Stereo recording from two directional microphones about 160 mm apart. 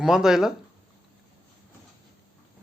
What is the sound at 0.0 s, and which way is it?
Speech, 5° right (ahead or behind).